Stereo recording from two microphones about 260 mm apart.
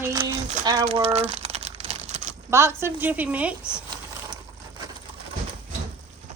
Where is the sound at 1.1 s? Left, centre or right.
Right.